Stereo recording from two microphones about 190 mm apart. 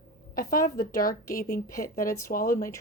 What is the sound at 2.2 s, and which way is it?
Speech, 45° left (ahead or behind).